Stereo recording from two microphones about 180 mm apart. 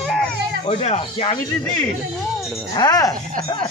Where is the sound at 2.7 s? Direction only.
20° left (ahead or behind).